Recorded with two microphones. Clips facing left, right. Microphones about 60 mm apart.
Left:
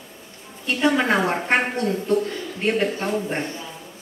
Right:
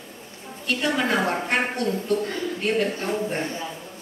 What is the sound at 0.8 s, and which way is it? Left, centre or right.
Speech, left.